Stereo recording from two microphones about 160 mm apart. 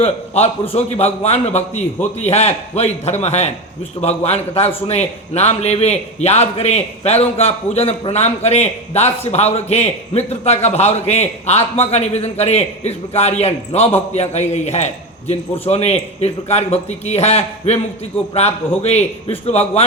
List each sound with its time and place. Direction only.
0.0 s a man's voice: 40° left (ahead or behind)
18.8 s a man's voice: 40° left (ahead or behind)